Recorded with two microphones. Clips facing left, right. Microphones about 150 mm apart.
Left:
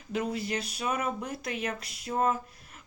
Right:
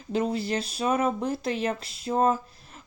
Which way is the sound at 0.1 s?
30° right (ahead or behind).